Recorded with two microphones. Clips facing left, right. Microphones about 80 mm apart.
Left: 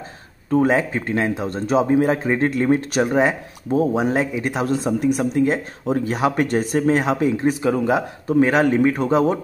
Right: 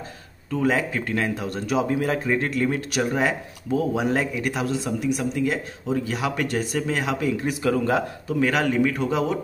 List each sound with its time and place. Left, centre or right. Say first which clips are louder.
0.5 s speech: left 5 dB; left
4.6 s speech: left 5 dB; left; by 8.0 s centre
8.3 s speech: left 7 dB; left